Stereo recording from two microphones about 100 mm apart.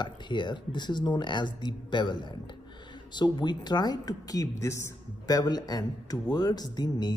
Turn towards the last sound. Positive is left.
turn(degrees=45)  # may be behind; listen again after turning